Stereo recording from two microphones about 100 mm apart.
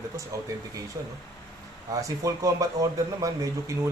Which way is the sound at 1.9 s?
35° right (ahead or behind).